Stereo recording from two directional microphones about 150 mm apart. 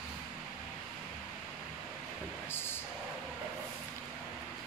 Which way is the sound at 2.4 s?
15° left (ahead or behind).